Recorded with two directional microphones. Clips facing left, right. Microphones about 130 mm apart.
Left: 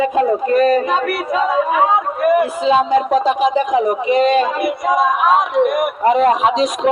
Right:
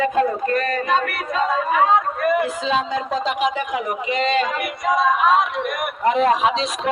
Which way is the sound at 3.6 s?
35° left (ahead or behind).